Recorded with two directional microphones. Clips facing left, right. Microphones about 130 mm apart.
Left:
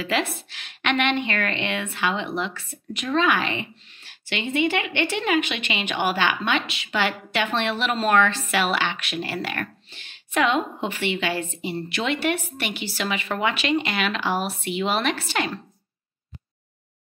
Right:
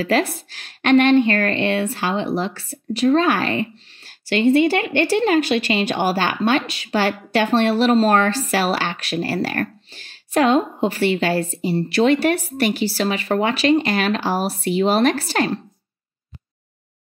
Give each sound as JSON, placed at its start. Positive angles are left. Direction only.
{"t": 0.0, "sound": "speech", "side_deg": -40}